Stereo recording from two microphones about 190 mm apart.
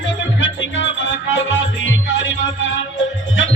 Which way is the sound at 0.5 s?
75° left (ahead or behind).